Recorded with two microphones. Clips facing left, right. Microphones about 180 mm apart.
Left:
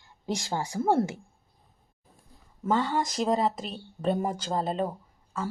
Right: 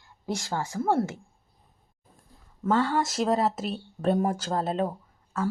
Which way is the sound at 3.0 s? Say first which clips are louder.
Right 1 dB; 5° right (ahead or behind).